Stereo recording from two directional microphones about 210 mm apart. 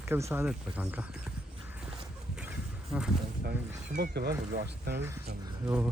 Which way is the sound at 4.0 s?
50° right (ahead or behind).